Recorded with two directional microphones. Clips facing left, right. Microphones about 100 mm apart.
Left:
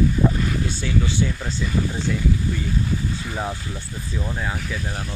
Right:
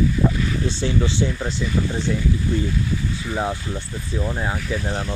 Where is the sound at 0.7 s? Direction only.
30° right (ahead or behind).